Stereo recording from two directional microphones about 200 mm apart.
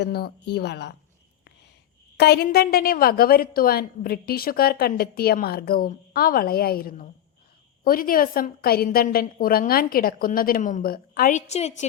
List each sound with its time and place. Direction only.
0.0 s speech: 50° left (ahead or behind)
2.1 s a woman's voice: 55° left (ahead or behind); by 11.9 s 35° left (ahead or behind)